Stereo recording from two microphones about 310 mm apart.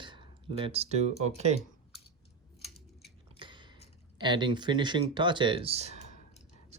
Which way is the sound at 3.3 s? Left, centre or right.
Centre.